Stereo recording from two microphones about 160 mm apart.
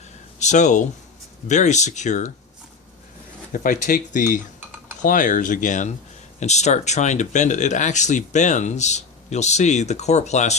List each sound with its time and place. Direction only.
0.3 s speech: 50° left (ahead or behind)
3.5 s speech: 55° left (ahead or behind)